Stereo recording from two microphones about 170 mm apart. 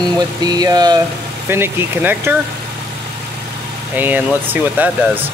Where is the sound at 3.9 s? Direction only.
10° right (ahead or behind).